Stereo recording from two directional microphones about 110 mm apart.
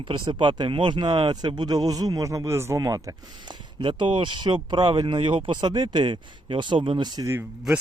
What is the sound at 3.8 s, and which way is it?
Speech, 45° right (ahead or behind).